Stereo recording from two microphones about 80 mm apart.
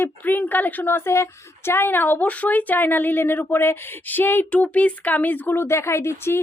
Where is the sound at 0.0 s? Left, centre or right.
Left.